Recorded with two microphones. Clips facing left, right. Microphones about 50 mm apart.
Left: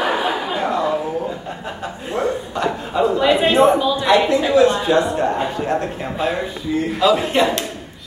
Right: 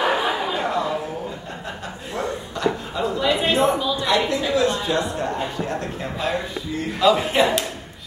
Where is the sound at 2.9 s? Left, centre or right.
Left.